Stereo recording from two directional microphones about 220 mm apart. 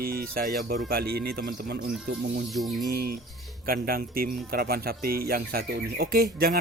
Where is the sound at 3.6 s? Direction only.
40° right (ahead or behind).